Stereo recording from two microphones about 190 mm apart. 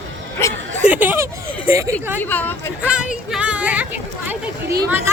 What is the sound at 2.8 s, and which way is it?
Speech, 5° right (ahead or behind).